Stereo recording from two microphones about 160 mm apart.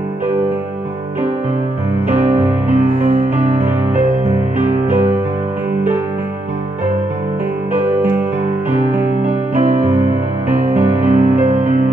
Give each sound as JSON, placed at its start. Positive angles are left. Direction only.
{"t": 2.1, "sound": "music", "side_deg": -10}
{"t": 4.8, "sound": "music", "side_deg": -10}
{"t": 7.8, "sound": "music", "side_deg": -10}
{"t": 10.8, "sound": "music", "side_deg": -10}
{"t": 11.4, "sound": "music", "side_deg": -50}